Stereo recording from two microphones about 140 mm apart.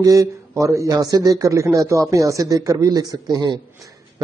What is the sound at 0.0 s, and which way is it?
Speech, 25° right (ahead or behind).